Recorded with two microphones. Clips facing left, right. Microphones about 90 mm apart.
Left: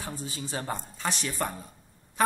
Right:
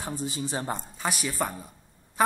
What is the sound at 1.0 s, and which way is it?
Speech, 10° right (ahead or behind).